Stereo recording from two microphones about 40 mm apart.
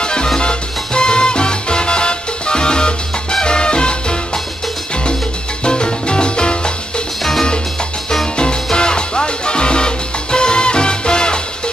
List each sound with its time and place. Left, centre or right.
0.0 s music: left
5.6 s salsa music: left
8.7 s music: left